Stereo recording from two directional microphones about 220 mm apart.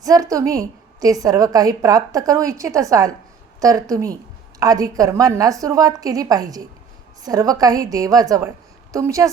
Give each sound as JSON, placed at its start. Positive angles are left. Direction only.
{"t": 0.0, "sound": "a woman's voice", "side_deg": -15}